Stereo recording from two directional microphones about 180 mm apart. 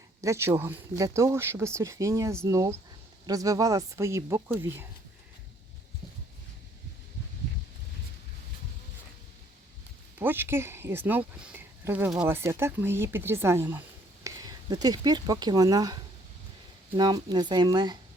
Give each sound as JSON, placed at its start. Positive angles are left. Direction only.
{"t": 0.2, "sound": "speech", "side_deg": -15}
{"t": 10.2, "sound": "speech", "side_deg": -10}
{"t": 17.0, "sound": "speech", "side_deg": -20}